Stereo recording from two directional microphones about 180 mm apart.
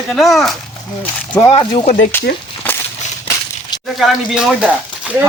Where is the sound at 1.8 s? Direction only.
40° left (ahead or behind).